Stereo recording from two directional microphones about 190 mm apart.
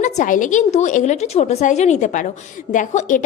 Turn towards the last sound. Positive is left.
turn(degrees=40)  # may be behind; listen again after turning